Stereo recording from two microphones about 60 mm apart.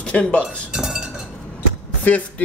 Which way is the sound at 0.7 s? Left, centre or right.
Centre.